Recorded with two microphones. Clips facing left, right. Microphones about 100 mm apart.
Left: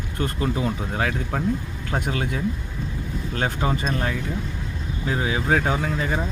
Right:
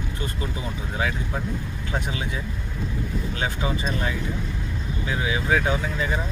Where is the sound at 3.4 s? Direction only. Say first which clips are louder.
Left 4 dB; 45° left (ahead or behind).